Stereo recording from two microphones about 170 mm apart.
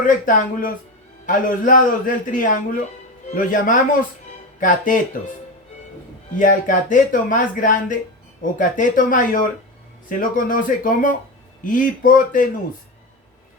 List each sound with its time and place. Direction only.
0.0 s speech: 50° left (ahead or behind)
5.2 s speech: 55° left (ahead or behind)
6.3 s speech: 50° left (ahead or behind)